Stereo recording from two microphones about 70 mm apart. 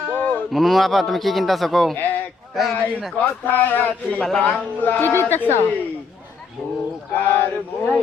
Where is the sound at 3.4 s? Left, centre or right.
Left.